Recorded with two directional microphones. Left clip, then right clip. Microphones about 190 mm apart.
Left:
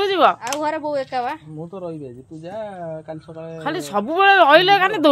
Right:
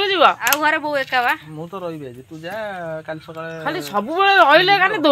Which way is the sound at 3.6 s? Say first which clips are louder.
Even; 30° left (ahead or behind).